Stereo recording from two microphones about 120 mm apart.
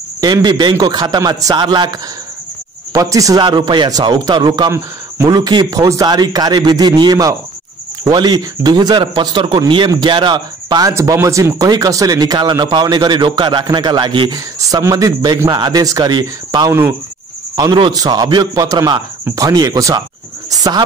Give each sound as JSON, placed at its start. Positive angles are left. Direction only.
{"t": 0.2, "sound": "speech", "side_deg": -40}
{"t": 3.4, "sound": "speech", "side_deg": -40}
{"t": 5.1, "sound": "speech", "side_deg": -25}
{"t": 10.9, "sound": "speech", "side_deg": -25}